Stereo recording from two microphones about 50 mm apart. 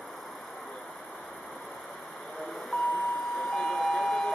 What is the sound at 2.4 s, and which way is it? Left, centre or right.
Vehicle, centre.